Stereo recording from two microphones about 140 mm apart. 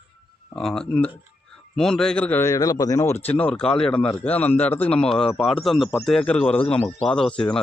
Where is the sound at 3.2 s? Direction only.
10° left (ahead or behind).